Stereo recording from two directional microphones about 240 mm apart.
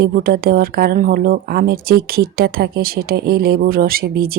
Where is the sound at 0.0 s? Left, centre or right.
Right.